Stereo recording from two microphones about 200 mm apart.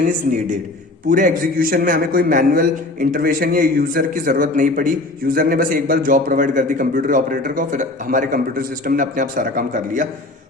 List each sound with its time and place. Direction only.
1.1 s a man's voice: 40° right (ahead or behind)